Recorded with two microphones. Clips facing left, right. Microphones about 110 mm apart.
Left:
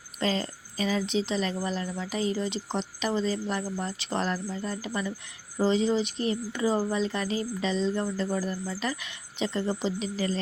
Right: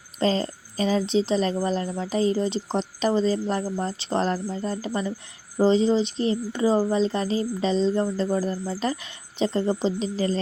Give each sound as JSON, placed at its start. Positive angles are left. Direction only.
{"t": 0.2, "sound": "speech", "side_deg": -35}